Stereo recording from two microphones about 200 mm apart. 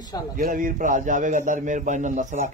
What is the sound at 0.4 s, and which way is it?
A man's voice, 45° right (ahead or behind).